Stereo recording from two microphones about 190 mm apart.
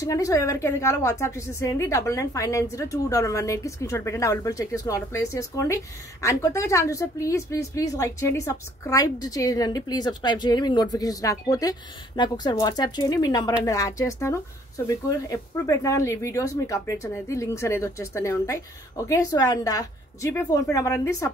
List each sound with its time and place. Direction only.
0.0 s a woman's voice: 15° left (ahead or behind)